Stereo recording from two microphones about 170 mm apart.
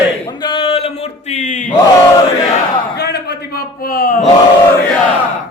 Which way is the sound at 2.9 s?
75° left (ahead or behind).